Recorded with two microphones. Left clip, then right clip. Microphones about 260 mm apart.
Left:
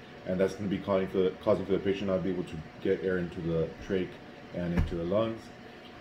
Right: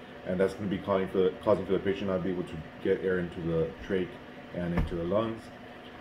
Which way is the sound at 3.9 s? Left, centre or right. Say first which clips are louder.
Even; centre.